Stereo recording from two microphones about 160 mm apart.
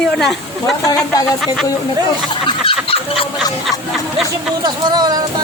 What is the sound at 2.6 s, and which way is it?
Chicken, 35° left (ahead or behind).